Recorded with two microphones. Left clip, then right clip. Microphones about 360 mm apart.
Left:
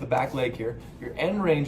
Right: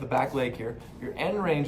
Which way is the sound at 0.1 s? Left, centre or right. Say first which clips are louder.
Left 1 dB; centre.